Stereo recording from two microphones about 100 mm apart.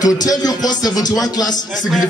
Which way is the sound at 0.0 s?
40° left (ahead or behind).